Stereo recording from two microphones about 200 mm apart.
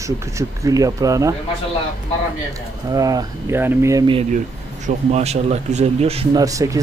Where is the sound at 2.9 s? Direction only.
20° right (ahead or behind).